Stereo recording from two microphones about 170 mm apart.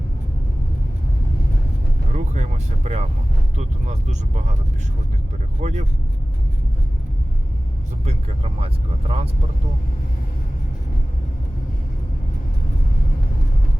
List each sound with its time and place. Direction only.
2.1 s vehicle: 40° right (ahead or behind)
3.6 s speech: 45° right (ahead or behind)
5.6 s speech: 40° right (ahead or behind)
8.6 s speech: 35° right (ahead or behind)